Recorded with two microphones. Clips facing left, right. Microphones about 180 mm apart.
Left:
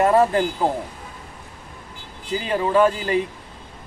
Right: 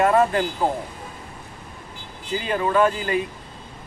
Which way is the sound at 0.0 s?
30° left (ahead or behind).